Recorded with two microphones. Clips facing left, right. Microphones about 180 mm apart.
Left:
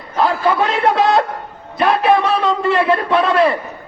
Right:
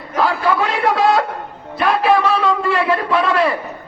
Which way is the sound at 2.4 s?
20° left (ahead or behind).